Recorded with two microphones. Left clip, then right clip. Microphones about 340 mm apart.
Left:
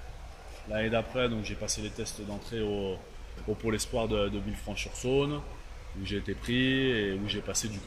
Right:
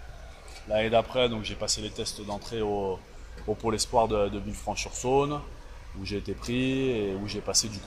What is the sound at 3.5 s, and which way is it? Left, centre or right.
Speech, right.